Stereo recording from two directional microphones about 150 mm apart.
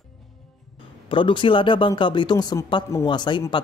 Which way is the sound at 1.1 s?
35° left (ahead or behind).